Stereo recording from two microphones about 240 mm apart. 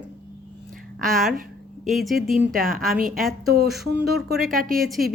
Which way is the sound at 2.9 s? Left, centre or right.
Right.